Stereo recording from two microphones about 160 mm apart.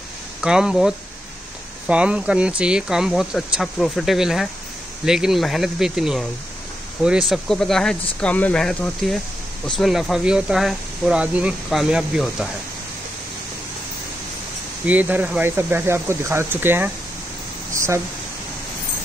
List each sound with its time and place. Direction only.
0.4 s speech: 5° right (ahead or behind)
14.9 s speech: 10° right (ahead or behind)